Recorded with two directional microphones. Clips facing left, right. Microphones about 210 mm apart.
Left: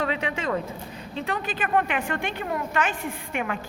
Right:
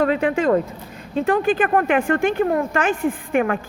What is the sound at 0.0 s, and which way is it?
A man's voice, 45° right (ahead or behind).